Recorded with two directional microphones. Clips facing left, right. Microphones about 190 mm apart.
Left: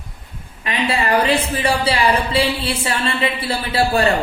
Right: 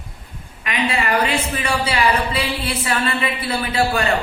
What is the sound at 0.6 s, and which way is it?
A woman's voice, 30° left (ahead or behind).